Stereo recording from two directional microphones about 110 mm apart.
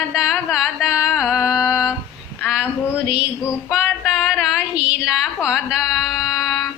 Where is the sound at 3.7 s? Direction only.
Centre (ahead or behind).